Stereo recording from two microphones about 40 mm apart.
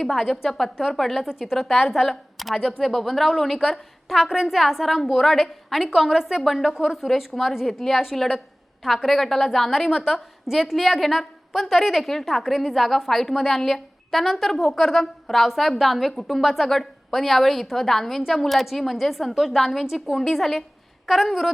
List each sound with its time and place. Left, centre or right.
0.1 s a woman's voice: centre
4.2 s a woman's voice: centre
4.4 s a woman's voice: centre
5.7 s a woman's voice: centre
6.4 s a woman's voice: centre
6.7 s a woman's voice: centre
10.0 s a woman's voice: centre
19.8 s a woman's voice: centre
20.1 s a woman's voice: centre